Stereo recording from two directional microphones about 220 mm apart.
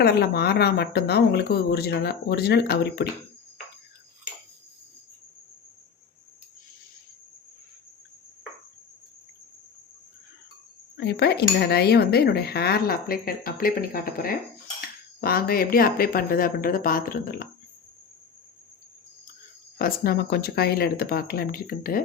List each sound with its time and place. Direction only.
0.0 s speech: 45° left (ahead or behind)
11.0 s speech: 45° left (ahead or behind)
19.8 s speech: 45° left (ahead or behind)